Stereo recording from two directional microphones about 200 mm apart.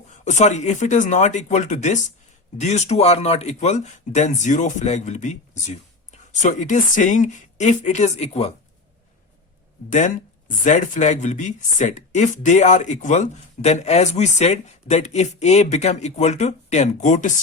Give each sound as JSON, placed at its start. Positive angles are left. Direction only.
{"t": 0.1, "sound": "speech", "side_deg": 35}
{"t": 10.6, "sound": "speech", "side_deg": 40}